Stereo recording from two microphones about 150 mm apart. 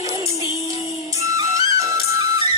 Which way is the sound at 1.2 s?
20° right (ahead or behind).